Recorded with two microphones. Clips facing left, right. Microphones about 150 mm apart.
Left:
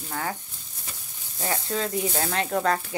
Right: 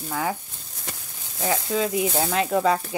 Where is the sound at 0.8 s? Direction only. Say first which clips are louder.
Right 7 dB; 90° right.